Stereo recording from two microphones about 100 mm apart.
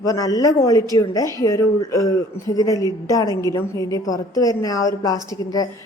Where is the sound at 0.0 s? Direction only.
40° left (ahead or behind).